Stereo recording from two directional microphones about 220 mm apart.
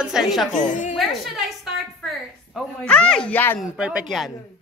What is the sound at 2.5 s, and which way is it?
Speech, 5° left (ahead or behind).